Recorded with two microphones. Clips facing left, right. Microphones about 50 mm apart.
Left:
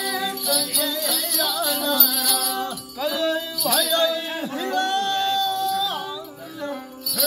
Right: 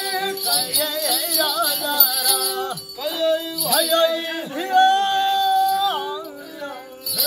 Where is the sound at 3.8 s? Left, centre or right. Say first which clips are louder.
Right 4 dB; right.